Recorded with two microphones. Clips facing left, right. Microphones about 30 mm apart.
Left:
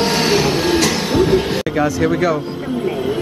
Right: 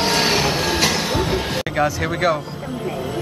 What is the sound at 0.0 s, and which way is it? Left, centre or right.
Printer, centre.